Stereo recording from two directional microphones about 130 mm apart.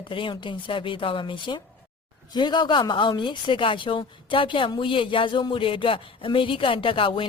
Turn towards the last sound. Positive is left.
turn(degrees=40)  # may be behind; listen again after turning